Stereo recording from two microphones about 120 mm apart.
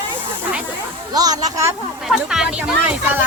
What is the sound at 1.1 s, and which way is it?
Speech, 30° right (ahead or behind).